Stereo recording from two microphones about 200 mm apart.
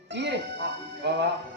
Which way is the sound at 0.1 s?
60° right (ahead or behind).